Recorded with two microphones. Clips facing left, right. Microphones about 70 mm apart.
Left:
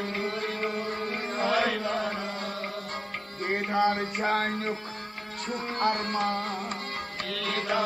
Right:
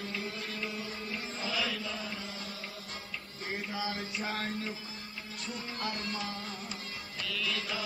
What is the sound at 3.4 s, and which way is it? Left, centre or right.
Music, left.